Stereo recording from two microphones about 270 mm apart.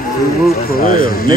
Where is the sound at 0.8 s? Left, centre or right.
Left.